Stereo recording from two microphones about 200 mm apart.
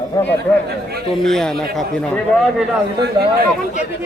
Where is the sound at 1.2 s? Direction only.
Centre (ahead or behind).